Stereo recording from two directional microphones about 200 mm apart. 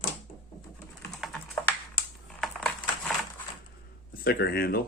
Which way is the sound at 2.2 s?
Centre (ahead or behind).